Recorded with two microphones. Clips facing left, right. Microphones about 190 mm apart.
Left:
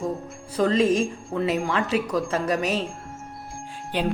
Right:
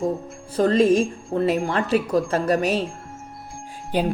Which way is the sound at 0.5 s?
50° right (ahead or behind).